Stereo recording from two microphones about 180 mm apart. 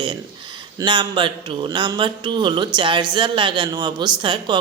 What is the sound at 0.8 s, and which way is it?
Speech, 25° right (ahead or behind).